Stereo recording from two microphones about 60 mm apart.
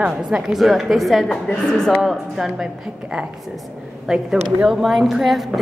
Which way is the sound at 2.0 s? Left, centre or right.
Centre.